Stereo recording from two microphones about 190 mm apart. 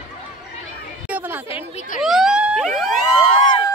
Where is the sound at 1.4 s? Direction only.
30° left (ahead or behind).